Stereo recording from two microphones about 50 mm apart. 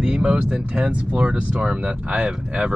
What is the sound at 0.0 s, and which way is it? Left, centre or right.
Speech, centre.